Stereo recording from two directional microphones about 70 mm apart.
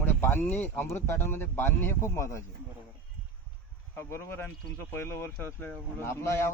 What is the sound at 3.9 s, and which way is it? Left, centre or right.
Speech, left.